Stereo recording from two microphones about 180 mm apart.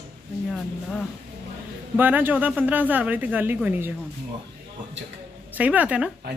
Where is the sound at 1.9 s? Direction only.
10° right (ahead or behind).